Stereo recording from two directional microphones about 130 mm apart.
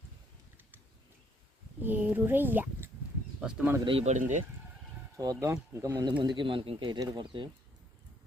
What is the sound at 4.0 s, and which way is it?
Speech, 70° right (ahead or behind).